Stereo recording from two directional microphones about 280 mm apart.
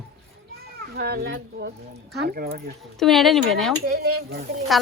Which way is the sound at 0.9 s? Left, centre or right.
Right.